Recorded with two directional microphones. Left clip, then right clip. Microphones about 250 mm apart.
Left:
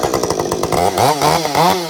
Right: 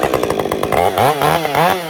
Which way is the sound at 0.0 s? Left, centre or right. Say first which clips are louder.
Right 1 dB; right.